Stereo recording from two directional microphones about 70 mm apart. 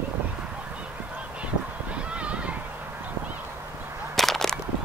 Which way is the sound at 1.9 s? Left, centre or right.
Centre.